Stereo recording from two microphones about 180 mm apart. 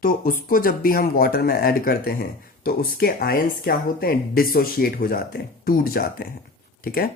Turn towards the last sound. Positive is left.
turn(degrees=55)  # may be behind; listen again after turning